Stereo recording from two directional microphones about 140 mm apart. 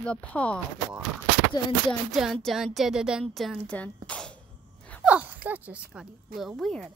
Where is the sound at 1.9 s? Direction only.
Centre (ahead or behind).